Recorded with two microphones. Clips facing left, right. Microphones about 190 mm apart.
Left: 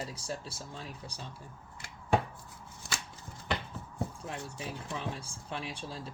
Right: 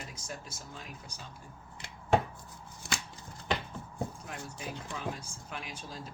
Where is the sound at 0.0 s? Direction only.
30° left (ahead or behind).